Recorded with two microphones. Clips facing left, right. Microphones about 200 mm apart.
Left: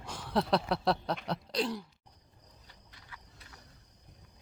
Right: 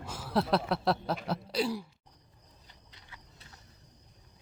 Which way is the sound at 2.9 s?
25° right (ahead or behind).